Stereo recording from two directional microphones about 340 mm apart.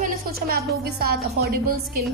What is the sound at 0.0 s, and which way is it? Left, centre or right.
A woman's voice, right.